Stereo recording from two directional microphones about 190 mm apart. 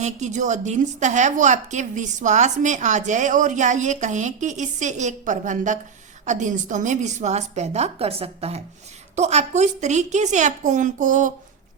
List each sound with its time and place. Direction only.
0.0 s a woman's voice: 40° right (ahead or behind)